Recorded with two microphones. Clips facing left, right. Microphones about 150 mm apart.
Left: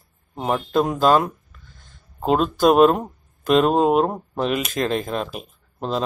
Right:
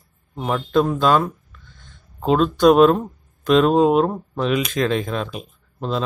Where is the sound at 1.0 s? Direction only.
40° left (ahead or behind).